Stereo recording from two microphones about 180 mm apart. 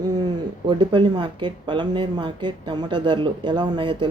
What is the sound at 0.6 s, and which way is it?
Speech, 25° right (ahead or behind).